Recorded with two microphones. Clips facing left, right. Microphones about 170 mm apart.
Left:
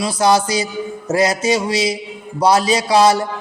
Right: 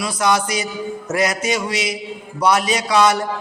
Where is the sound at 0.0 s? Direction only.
30° left (ahead or behind).